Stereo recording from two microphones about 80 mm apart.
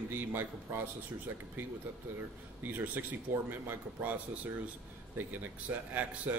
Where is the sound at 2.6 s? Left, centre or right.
Right.